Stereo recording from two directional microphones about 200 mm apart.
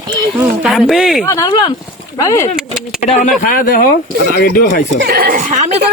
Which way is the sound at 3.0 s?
35° left (ahead or behind).